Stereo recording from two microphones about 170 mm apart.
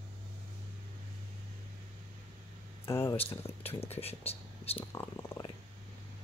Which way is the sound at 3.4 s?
35° left (ahead or behind).